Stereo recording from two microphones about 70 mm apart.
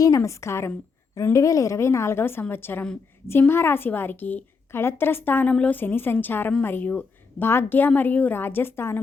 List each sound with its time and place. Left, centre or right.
0.2 s a woman's voice: left